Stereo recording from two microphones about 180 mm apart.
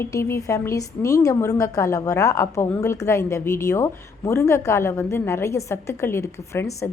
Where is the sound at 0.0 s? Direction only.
15° left (ahead or behind).